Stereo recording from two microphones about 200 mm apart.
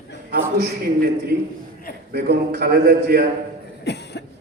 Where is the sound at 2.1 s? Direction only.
55° right (ahead or behind).